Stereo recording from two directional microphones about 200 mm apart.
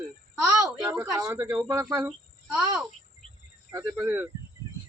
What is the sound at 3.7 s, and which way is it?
Speech, 15° right (ahead or behind).